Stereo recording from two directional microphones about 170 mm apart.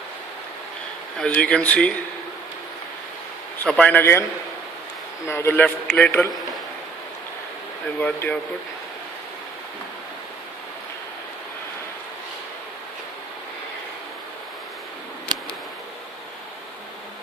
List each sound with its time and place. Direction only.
1.2 s speech: 5° left (ahead or behind)
3.6 s speech: 10° left (ahead or behind)
5.2 s speech: 15° left (ahead or behind)
7.9 s speech: 10° left (ahead or behind)